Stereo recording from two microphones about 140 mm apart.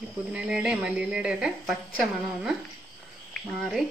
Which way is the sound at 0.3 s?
10° right (ahead or behind).